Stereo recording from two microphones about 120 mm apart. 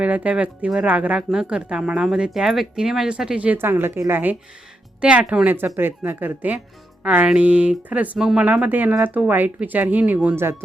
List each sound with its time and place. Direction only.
0.0 s speech: 10° right (ahead or behind)